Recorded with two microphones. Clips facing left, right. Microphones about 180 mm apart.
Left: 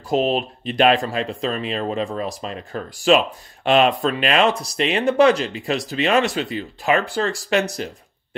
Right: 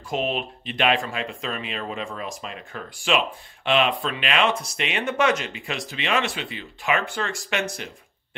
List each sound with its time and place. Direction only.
0.1 s speech: 35° left (ahead or behind)